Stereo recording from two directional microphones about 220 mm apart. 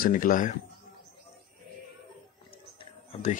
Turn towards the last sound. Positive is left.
turn(degrees=30)  # may be behind; listen again after turning